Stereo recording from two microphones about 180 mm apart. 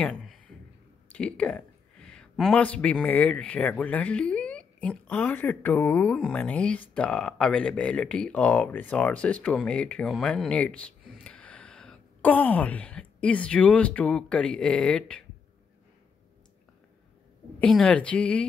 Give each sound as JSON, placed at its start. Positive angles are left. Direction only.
{"t": 0.0, "sound": "a man's voice", "side_deg": 0}
{"t": 17.6, "sound": "a woman's voice", "side_deg": 5}